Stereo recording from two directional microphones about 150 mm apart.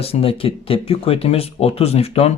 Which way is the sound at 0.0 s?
40° left (ahead or behind).